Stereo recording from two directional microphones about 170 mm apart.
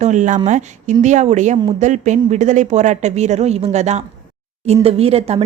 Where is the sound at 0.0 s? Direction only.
45° right (ahead or behind).